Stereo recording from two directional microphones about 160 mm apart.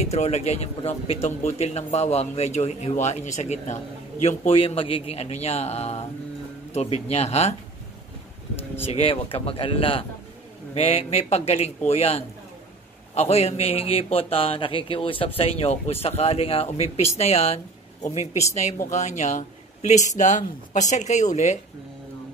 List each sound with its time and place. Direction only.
0.0 s a man's voice: 45° left (ahead or behind)
8.9 s a man's voice: 35° left (ahead or behind)